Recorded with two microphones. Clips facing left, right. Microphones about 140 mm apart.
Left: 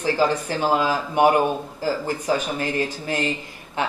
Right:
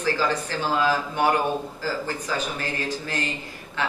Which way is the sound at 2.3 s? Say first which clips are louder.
Left 6 dB; 10° left (ahead or behind).